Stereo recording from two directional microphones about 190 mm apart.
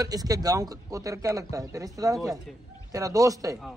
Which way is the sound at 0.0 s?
20° right (ahead or behind).